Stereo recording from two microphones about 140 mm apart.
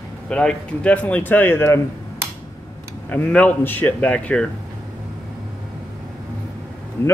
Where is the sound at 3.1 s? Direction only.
10° left (ahead or behind).